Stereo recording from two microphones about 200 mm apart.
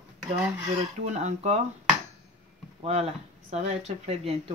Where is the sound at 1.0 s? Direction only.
35° right (ahead or behind).